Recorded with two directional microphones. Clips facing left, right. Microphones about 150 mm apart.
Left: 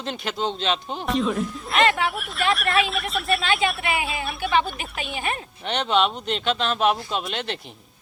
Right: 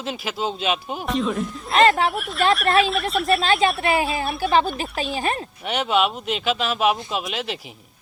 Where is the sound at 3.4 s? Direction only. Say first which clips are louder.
Right 4 dB; 35° right (ahead or behind).